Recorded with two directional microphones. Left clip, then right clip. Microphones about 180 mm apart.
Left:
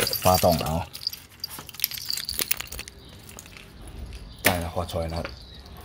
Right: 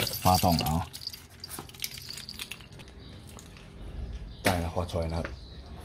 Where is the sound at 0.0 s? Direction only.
20° left (ahead or behind).